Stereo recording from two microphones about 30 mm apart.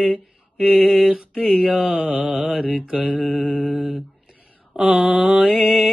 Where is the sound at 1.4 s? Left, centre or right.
Centre.